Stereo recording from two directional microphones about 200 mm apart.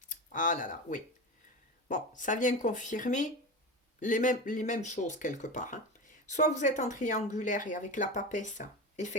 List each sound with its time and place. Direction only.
0.1 s speech: 40° left (ahead or behind)